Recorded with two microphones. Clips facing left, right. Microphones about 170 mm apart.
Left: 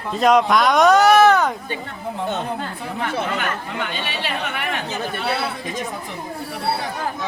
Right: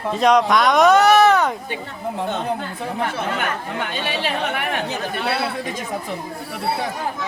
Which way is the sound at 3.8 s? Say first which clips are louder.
Right 2 dB; 50° right (ahead or behind).